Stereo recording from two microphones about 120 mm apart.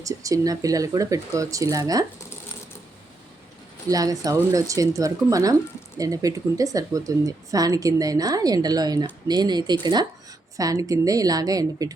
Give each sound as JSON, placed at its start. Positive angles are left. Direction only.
{"t": 0.0, "sound": "speech", "side_deg": -30}
{"t": 3.8, "sound": "speech", "side_deg": -30}